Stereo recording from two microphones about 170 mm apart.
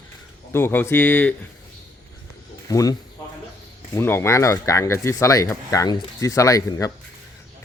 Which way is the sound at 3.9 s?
15° left (ahead or behind).